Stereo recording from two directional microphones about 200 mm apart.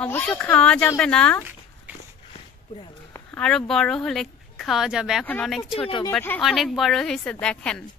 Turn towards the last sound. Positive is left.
turn(degrees=5)  # may be behind; listen again after turning